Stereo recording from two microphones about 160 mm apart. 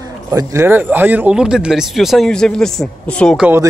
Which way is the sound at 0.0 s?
20° right (ahead or behind).